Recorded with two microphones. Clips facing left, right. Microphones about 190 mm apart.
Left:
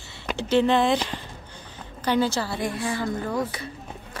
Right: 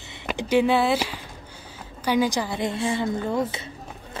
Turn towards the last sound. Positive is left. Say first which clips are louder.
# right 2 dB
turn(degrees=-25)  # may be behind; listen again after turning